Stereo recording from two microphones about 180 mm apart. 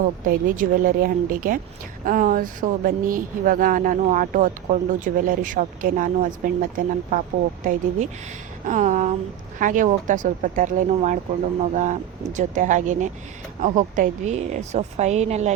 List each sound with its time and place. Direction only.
0.3 s speech: 50° right (ahead or behind)